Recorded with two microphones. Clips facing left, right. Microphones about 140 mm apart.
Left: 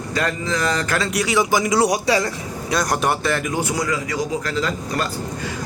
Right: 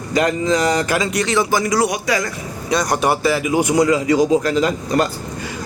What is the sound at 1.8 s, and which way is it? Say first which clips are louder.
Speech: left 1 dB; 30° left (ahead or behind).